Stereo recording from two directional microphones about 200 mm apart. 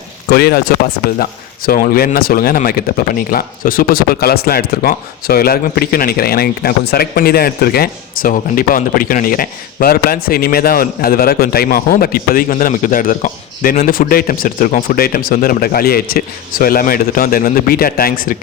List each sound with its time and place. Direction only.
0.3 s speech: 50° left (ahead or behind)